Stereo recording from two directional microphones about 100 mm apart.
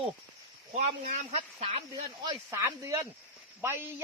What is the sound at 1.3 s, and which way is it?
Speech, 90° right.